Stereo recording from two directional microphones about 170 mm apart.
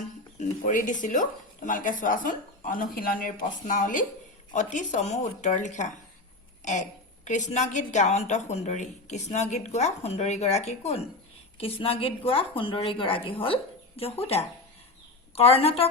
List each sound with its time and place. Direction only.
0.3 s a woman's voice: 50° left (ahead or behind)